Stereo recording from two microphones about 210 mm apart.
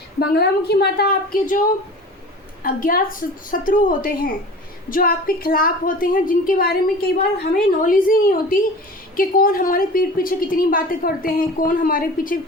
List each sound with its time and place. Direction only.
0.2 s a woman's voice: 50° left (ahead or behind)
2.6 s a woman's voice: 40° left (ahead or behind)